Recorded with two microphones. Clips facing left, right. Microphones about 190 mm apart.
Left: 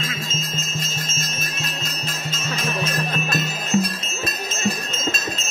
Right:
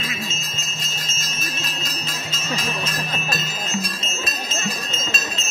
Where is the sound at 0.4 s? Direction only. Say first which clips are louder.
Left 6 dB; 50° left (ahead or behind).